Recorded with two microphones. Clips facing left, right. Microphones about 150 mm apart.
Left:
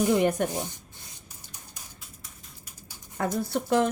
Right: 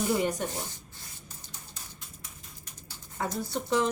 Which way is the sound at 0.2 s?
60° left (ahead or behind).